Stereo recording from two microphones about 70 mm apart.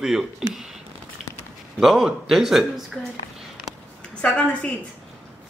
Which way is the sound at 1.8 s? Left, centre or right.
Centre.